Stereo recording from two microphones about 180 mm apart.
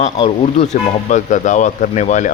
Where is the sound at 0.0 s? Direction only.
40° left (ahead or behind).